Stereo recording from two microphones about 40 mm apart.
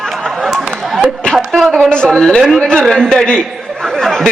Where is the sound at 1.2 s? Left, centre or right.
Left.